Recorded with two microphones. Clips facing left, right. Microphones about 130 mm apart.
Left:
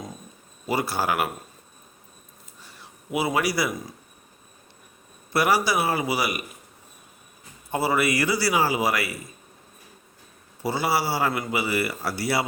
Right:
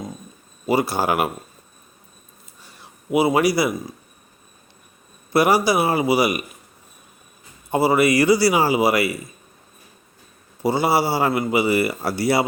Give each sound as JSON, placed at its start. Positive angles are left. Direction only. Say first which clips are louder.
{"t": 0.7, "sound": "speech", "louder": "right 5 dB", "side_deg": -15}
{"t": 3.1, "sound": "a man's voice", "louder": "right 7 dB", "side_deg": -15}
{"t": 5.3, "sound": "a man's voice", "louder": "right 5 dB", "side_deg": -15}
{"t": 7.7, "sound": "a man's voice", "louder": "right 6 dB", "side_deg": -15}
{"t": 10.6, "sound": "speech", "louder": "right 6 dB", "side_deg": -15}